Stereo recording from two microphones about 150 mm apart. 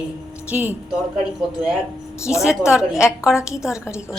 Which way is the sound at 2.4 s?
5° right (ahead or behind).